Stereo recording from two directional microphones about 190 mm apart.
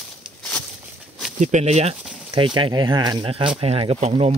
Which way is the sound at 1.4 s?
40° right (ahead or behind).